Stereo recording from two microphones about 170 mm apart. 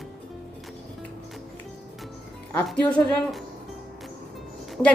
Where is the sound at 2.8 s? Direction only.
10° left (ahead or behind).